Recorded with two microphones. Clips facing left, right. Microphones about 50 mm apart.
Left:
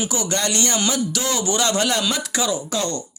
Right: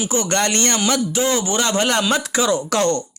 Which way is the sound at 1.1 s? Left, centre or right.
Right.